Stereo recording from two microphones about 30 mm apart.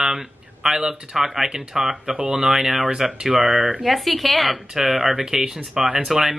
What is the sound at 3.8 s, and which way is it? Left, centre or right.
Speech, centre.